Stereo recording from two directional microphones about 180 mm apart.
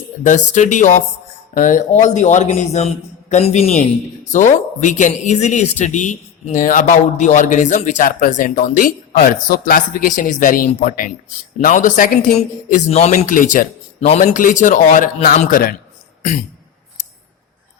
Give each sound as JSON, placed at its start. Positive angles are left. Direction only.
{"t": 0.3, "sound": "a man's voice", "side_deg": 45}